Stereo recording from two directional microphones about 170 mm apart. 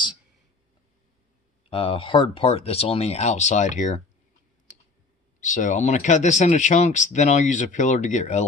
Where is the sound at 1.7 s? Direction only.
30° left (ahead or behind).